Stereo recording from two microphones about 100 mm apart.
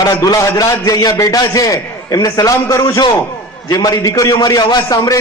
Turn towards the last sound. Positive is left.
turn(degrees=35)  # may be behind; listen again after turning